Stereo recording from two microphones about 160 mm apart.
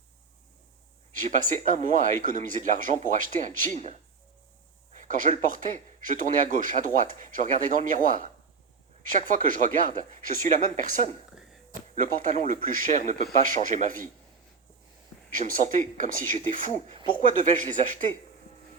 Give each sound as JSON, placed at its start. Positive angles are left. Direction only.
{"t": 1.1, "sound": "speech", "side_deg": -55}
{"t": 15.3, "sound": "speech", "side_deg": -55}